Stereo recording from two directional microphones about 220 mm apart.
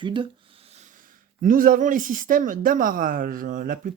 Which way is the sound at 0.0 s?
20° right (ahead or behind).